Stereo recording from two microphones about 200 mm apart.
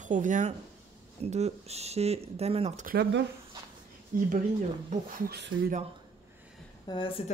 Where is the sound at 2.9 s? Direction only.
55° right (ahead or behind).